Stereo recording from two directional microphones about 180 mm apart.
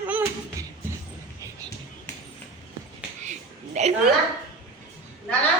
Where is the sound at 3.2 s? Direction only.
40° right (ahead or behind).